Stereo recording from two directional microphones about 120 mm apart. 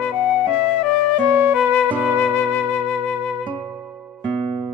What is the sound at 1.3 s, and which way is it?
Music, 20° right (ahead or behind).